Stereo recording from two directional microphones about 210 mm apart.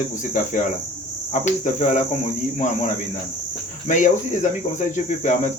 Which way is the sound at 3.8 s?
35° left (ahead or behind).